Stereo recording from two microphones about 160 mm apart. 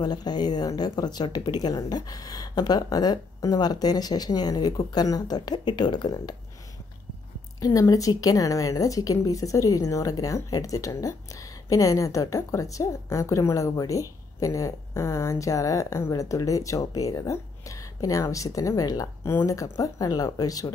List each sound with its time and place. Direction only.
0.0 s speech: 25° left (ahead or behind)
7.6 s speech: 20° left (ahead or behind)